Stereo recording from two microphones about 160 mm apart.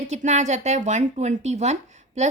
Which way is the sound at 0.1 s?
45° right (ahead or behind).